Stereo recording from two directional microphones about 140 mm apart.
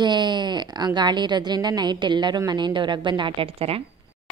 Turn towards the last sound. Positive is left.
turn(degrees=-45)  # may be behind; listen again after turning